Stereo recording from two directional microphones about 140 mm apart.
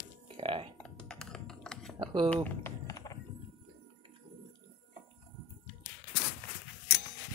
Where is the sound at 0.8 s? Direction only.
5° left (ahead or behind).